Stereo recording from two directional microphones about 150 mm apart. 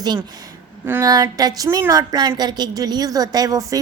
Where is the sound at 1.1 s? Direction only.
25° right (ahead or behind).